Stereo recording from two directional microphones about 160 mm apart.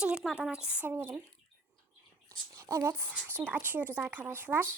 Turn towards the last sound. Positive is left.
turn(degrees=-10)  # may be behind; listen again after turning